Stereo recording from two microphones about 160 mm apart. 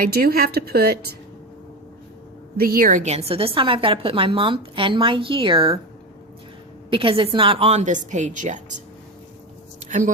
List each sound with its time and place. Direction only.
0.0 s a woman's voice: 70° right (ahead or behind)
2.6 s a woman's voice: 65° right (ahead or behind); by 5.8 s 35° right (ahead or behind)
6.9 s a woman's voice: 35° right (ahead or behind); by 8.6 s 50° right (ahead or behind)
9.8 s a sound: 50° right (ahead or behind)